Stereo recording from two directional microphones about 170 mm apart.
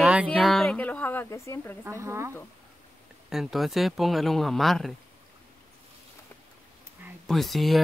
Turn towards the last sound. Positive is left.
turn(degrees=0)  # may be behind; listen again after turning